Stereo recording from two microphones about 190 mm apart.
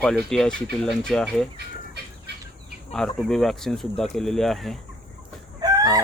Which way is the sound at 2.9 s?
Centre (ahead or behind).